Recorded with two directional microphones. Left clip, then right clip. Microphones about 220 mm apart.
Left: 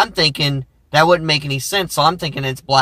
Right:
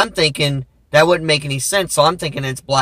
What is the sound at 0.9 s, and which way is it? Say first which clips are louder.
Speech: even; 10° right (ahead or behind).